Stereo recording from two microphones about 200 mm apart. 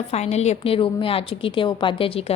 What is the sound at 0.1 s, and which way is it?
A woman's voice, 30° left (ahead or behind).